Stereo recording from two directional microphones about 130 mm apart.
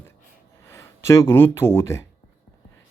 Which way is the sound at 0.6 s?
20° left (ahead or behind).